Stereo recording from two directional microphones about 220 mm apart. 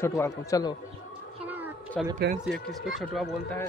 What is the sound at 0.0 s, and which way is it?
Speech, 10° left (ahead or behind).